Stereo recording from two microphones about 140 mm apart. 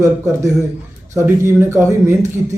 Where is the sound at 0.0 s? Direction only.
25° right (ahead or behind).